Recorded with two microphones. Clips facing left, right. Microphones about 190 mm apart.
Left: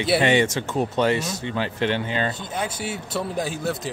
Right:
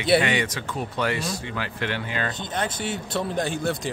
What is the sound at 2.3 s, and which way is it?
A man's voice, 5° left (ahead or behind).